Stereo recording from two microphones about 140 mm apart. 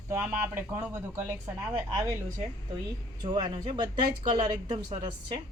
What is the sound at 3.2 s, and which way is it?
A woman's voice, 30° right (ahead or behind).